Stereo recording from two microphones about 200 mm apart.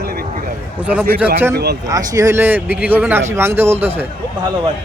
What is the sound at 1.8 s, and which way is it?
Speech, 20° right (ahead or behind).